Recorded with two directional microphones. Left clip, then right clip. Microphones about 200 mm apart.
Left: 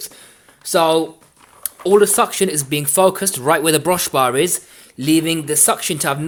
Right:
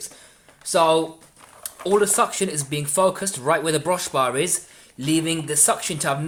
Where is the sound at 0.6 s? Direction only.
40° left (ahead or behind).